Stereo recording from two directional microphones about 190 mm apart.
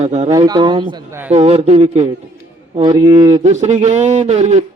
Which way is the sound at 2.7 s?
20° right (ahead or behind).